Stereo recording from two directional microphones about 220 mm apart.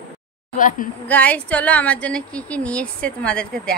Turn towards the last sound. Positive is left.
turn(degrees=5)  # may be behind; listen again after turning